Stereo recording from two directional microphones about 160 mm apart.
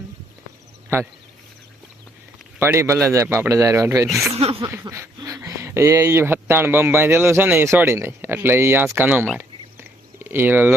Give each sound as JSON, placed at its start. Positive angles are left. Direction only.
{"t": 2.6, "sound": "speech", "side_deg": -15}
{"t": 4.4, "sound": "speech", "side_deg": -40}
{"t": 4.6, "sound": "speech", "side_deg": -15}